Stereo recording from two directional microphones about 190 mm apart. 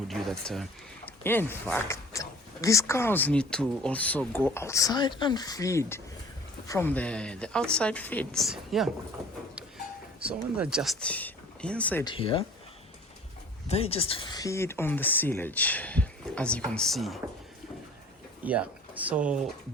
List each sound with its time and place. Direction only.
0.1 s speech: centre (ahead or behind)
10.2 s speech: 5° right (ahead or behind)
12.0 s speech: 30° left (ahead or behind)
13.7 s speech: 30° left (ahead or behind); by 17.2 s centre (ahead or behind)
18.4 s speech: 10° right (ahead or behind)